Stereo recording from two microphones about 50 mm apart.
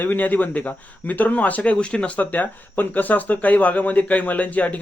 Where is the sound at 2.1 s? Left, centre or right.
Left.